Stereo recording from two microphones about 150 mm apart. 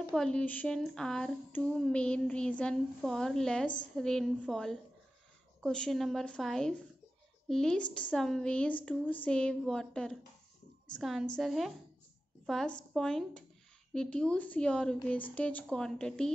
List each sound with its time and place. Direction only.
0.1 s a woman's voice: 5° left (ahead or behind)